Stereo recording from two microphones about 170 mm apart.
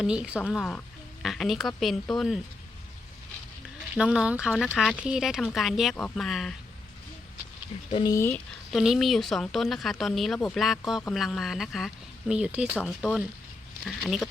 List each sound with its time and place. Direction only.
0.0 s speech: 5° right (ahead or behind)
3.9 s speech: 5° right (ahead or behind)
7.9 s speech: 30° left (ahead or behind)
8.1 s speech: 15° left (ahead or behind)
8.7 s speech: centre (ahead or behind)